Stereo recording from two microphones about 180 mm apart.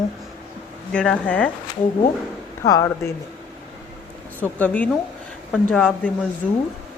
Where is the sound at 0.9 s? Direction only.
5° left (ahead or behind).